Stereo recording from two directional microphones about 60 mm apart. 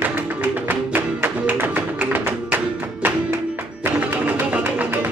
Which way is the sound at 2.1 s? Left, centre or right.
Right.